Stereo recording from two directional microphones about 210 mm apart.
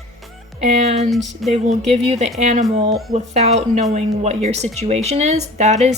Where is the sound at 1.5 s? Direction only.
30° right (ahead or behind).